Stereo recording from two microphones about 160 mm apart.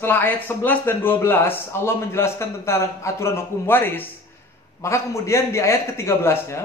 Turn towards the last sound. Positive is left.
turn(degrees=15)  # may be behind; listen again after turning